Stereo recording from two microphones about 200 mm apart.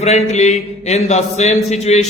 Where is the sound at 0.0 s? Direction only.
35° left (ahead or behind).